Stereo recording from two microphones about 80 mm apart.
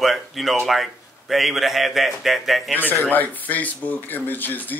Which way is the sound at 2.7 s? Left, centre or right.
Left.